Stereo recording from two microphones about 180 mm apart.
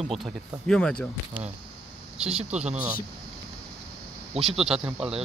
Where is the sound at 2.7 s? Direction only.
10° right (ahead or behind).